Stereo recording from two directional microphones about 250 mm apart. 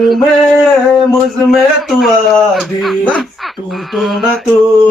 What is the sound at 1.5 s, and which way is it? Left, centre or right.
Speech, centre.